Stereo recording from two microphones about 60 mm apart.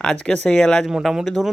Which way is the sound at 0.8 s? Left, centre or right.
Centre.